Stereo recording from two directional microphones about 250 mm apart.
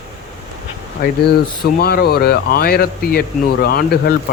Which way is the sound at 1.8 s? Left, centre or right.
Left.